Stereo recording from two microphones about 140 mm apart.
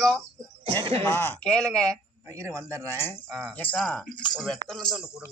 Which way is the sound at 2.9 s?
15° left (ahead or behind).